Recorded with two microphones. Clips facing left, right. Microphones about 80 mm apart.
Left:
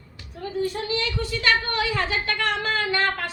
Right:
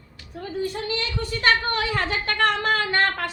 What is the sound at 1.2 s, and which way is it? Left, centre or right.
A woman's voice, right.